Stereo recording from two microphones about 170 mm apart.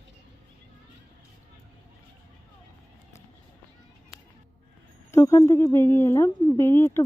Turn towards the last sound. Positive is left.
turn(degrees=15)  # may be behind; listen again after turning